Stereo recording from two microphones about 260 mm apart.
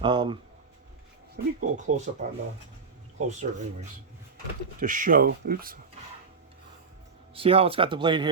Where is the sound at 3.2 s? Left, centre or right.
Right.